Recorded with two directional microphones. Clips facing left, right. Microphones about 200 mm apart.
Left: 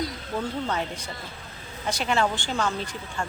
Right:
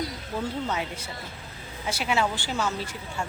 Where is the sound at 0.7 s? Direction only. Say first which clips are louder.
Left 1 dB; 5° right (ahead or behind).